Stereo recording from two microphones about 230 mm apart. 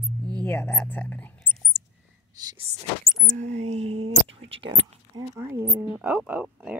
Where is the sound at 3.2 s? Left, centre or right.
Right.